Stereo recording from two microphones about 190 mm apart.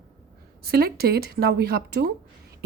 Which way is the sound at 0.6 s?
55° right (ahead or behind).